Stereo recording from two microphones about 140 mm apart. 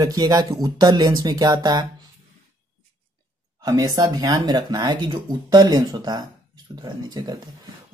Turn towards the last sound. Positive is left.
turn(degrees=-30)  # may be behind; listen again after turning